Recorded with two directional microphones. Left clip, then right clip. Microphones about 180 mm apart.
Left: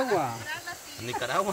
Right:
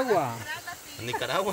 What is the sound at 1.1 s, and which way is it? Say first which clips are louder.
Speech: even; 55° right (ahead or behind).